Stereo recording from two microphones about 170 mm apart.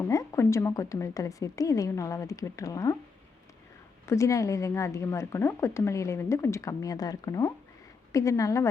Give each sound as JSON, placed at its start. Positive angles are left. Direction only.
{"t": 0.1, "sound": "a woman's voice", "side_deg": 20}
{"t": 4.0, "sound": "a woman's voice", "side_deg": 15}